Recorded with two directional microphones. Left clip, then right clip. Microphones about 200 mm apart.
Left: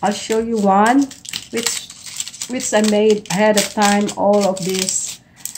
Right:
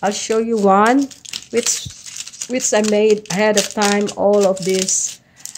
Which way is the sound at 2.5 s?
55° right (ahead or behind).